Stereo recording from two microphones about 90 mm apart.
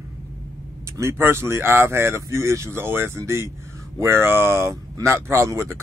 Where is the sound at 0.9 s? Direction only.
30° right (ahead or behind).